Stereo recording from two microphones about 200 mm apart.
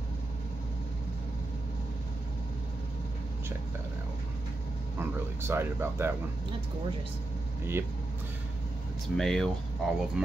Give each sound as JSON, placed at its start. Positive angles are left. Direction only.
{"t": 5.5, "sound": "speech", "side_deg": -10}
{"t": 9.1, "sound": "speech", "side_deg": 0}